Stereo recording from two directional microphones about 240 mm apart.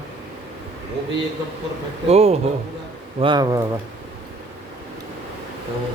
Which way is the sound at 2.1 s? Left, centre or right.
Right.